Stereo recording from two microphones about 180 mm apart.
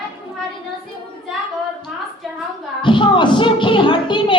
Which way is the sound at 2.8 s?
25° left (ahead or behind).